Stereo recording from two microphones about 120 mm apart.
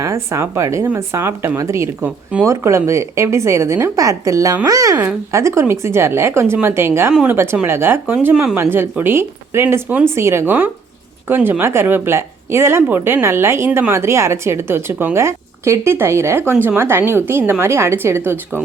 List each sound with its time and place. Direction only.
0.0 s speech: 25° right (ahead or behind)
7.1 s speech: 5° right (ahead or behind)
7.3 s speech: 15° right (ahead or behind)
8.7 s speech: 20° right (ahead or behind)